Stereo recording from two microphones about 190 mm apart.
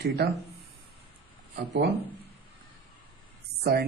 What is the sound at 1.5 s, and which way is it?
Speech, 65° right (ahead or behind).